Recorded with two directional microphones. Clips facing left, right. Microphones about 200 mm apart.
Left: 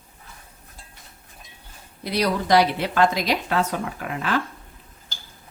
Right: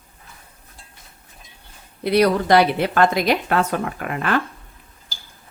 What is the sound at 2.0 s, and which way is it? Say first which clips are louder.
A woman's voice: right 7 dB; 60° right (ahead or behind).